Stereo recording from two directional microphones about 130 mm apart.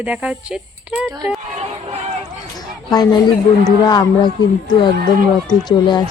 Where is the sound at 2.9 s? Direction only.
30° left (ahead or behind).